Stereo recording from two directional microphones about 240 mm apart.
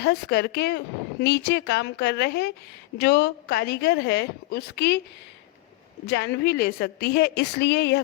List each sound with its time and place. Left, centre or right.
0.0 s a woman's voice: left
6.1 s a woman's voice: left